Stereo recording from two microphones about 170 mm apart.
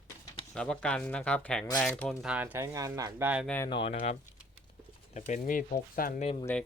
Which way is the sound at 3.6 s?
30° left (ahead or behind).